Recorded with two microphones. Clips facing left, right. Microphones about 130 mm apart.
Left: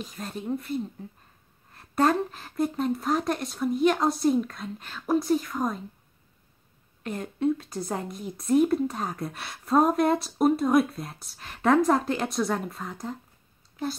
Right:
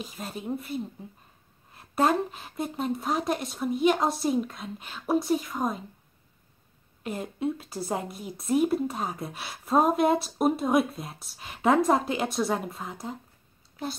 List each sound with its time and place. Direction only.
0.0 s a woman's voice: centre (ahead or behind)
7.0 s a woman's voice: 10° right (ahead or behind)